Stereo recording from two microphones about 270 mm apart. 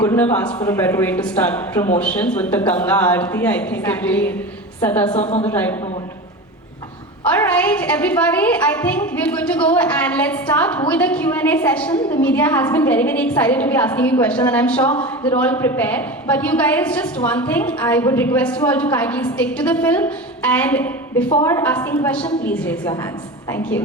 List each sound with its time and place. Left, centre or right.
0.0 s a woman's voice: centre
5.1 s a woman's voice: left
5.5 s speech: centre
7.3 s a woman's voice: centre